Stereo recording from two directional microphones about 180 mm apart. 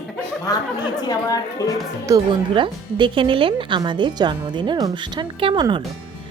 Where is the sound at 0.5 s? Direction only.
20° left (ahead or behind).